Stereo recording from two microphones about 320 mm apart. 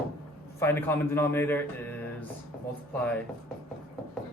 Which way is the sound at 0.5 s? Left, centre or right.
Centre.